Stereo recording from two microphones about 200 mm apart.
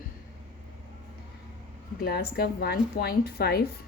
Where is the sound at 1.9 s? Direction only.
50° left (ahead or behind).